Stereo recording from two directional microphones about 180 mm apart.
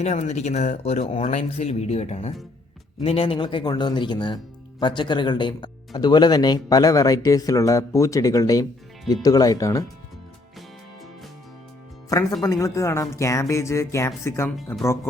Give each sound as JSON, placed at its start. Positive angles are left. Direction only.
{"t": 0.0, "sound": "speech", "side_deg": 40}
{"t": 12.0, "sound": "speech", "side_deg": 20}